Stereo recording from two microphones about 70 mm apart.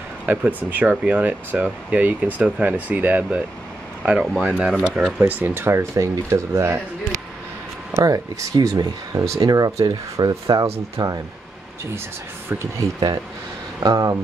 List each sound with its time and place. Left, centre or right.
0.3 s speech: right
8.0 s speech: right
12.8 s speech: right